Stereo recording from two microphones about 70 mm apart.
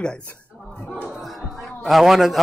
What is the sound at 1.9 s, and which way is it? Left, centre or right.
Speech, centre.